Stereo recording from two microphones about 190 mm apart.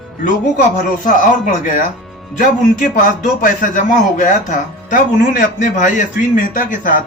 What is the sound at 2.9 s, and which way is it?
Speech, 45° left (ahead or behind).